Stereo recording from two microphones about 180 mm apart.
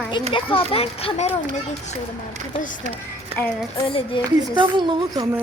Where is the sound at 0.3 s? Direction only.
30° left (ahead or behind).